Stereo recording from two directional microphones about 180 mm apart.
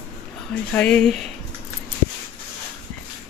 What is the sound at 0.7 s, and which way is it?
Speech, 5° left (ahead or behind).